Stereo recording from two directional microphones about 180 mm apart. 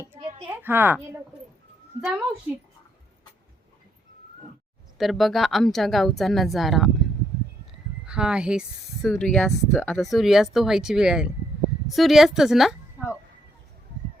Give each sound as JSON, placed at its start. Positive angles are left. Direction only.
{"t": 0.1, "sound": "a sound", "side_deg": -25}
{"t": 0.6, "sound": "a woman's voice", "side_deg": -10}
{"t": 2.0, "sound": "speech", "side_deg": 0}
{"t": 4.9, "sound": "speech", "side_deg": 0}
{"t": 8.0, "sound": "speech", "side_deg": -5}